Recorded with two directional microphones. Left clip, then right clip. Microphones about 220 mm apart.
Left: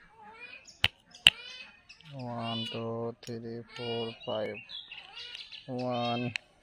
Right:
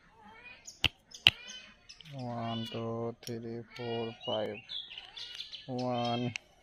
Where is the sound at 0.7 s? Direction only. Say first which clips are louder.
Right 3 dB; 25° right (ahead or behind).